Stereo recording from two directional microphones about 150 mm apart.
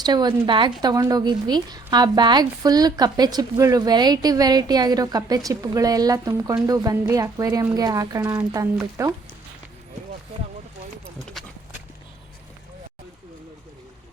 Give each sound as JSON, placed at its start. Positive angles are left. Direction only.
{"t": 0.0, "sound": "speech", "side_deg": -30}